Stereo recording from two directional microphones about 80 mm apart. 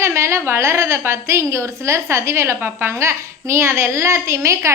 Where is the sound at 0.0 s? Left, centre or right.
Right.